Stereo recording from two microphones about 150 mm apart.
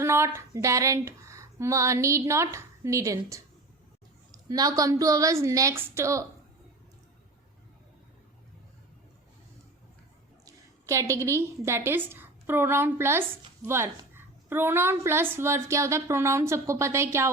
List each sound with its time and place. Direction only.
0.0 s speech: 20° right (ahead or behind)
4.4 s a woman's voice: 25° right (ahead or behind)
10.4 s a woman's voice: 20° right (ahead or behind)